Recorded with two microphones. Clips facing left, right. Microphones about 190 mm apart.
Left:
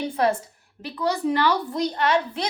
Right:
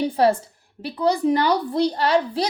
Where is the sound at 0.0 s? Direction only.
35° right (ahead or behind).